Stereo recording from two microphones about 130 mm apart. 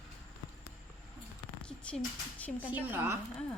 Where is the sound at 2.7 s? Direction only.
15° right (ahead or behind).